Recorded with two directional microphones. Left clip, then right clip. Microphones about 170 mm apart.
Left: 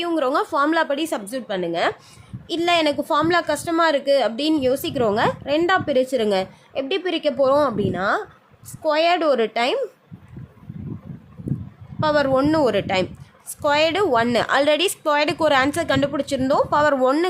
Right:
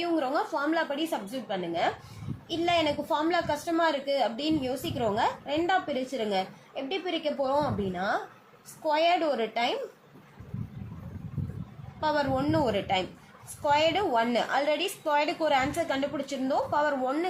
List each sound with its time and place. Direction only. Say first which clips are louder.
0.0 s a woman's voice: left 7 dB; 75° left (ahead or behind)
2.5 s a woman's voice: left 7 dB; 90° left
11.9 s a woman's voice: left 9 dB; 90° left